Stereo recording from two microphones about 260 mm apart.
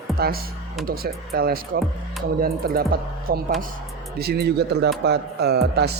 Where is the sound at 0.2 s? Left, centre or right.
Right.